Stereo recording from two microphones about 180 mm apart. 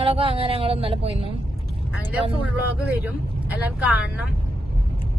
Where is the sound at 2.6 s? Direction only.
10° right (ahead or behind).